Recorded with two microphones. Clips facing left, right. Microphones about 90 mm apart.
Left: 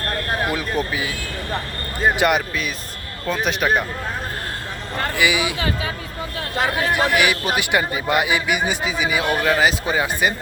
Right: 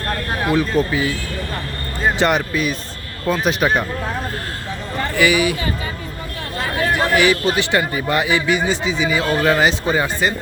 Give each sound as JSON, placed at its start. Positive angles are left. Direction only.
{"t": 0.4, "sound": "a man's voice", "side_deg": 10}
{"t": 5.1, "sound": "a man's voice", "side_deg": 15}
{"t": 6.9, "sound": "a man's voice", "side_deg": 15}
{"t": 9.4, "sound": "speech", "side_deg": 0}